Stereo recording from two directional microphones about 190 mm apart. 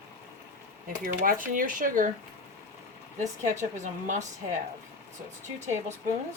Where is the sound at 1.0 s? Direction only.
45° right (ahead or behind).